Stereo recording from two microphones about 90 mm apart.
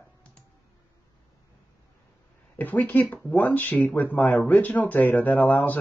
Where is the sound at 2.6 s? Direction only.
20° left (ahead or behind).